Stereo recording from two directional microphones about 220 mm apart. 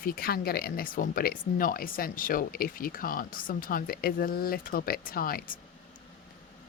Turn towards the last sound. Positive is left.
turn(degrees=40)  # may be behind; listen again after turning